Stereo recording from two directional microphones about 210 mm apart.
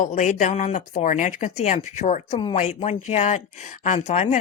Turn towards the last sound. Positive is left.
turn(degrees=35)  # may be behind; listen again after turning